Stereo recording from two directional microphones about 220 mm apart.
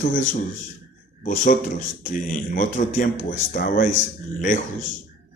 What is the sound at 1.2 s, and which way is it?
Speech, 35° left (ahead or behind).